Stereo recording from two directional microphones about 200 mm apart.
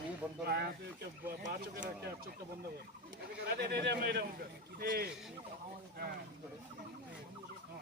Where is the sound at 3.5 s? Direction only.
55° right (ahead or behind).